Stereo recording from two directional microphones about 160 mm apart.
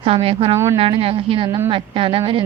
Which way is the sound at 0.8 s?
35° right (ahead or behind).